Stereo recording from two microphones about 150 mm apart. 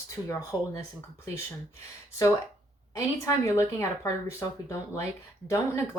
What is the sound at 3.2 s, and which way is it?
Speech, 20° left (ahead or behind).